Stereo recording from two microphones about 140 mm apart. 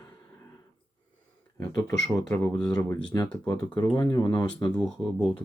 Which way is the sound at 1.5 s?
20° left (ahead or behind).